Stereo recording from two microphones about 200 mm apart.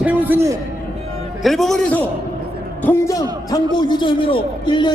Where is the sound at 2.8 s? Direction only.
15° left (ahead or behind).